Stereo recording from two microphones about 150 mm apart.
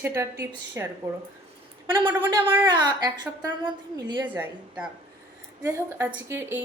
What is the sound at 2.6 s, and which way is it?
Speech, 30° right (ahead or behind).